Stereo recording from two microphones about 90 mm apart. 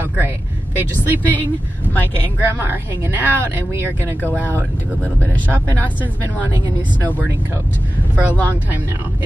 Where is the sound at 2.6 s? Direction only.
25° right (ahead or behind).